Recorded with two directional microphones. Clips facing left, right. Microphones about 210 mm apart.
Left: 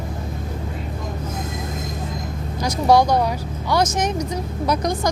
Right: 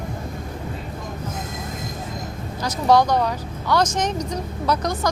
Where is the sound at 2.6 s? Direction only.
10° left (ahead or behind).